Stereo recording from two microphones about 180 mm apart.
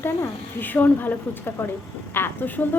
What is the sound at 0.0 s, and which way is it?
A woman's voice, 10° left (ahead or behind).